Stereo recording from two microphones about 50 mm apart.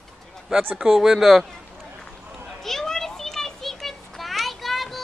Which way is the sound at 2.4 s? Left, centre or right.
Centre.